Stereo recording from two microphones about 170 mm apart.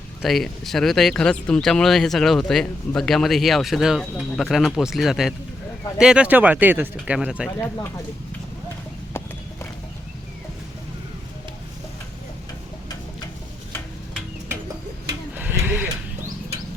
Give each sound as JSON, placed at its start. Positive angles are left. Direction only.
{"t": 0.2, "sound": "speech", "side_deg": 0}
{"t": 7.6, "sound": "speech", "side_deg": 15}
{"t": 15.4, "sound": "a sound", "side_deg": -10}